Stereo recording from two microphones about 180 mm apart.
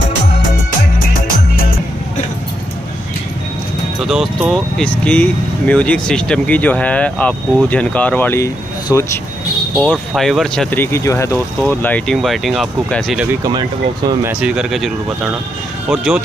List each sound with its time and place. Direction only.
4.0 s speech: centre (ahead or behind); by 9.0 s 15° left (ahead or behind)
9.8 s speech: 5° left (ahead or behind)
13.3 s speech: 20° right (ahead or behind)
14.2 s speech: 5° right (ahead or behind)